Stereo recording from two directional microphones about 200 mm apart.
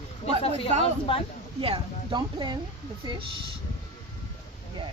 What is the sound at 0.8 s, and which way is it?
Speech, 25° left (ahead or behind).